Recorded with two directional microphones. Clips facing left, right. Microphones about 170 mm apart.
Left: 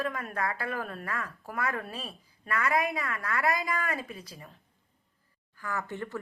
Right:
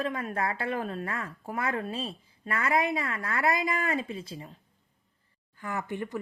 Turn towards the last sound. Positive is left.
turn(degrees=-15)  # may be behind; listen again after turning